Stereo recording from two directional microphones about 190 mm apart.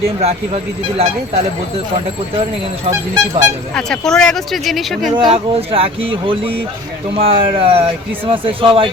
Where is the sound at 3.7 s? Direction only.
5° left (ahead or behind).